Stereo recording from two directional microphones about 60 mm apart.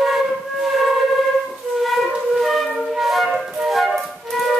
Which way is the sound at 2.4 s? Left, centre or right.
Centre.